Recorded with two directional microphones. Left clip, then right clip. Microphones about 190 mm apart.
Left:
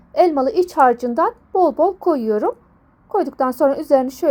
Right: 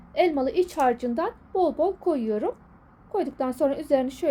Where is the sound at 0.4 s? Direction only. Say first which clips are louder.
Left 8 dB; 25° left (ahead or behind).